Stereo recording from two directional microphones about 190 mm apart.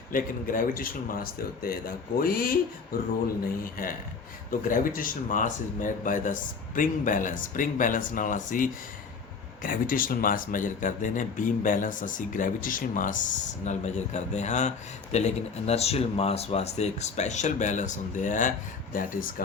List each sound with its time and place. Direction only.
0.1 s speech: 45° left (ahead or behind)
3.6 s speech: 45° left (ahead or behind)